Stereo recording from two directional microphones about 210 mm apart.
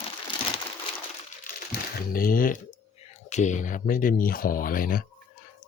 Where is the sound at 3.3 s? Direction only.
35° left (ahead or behind).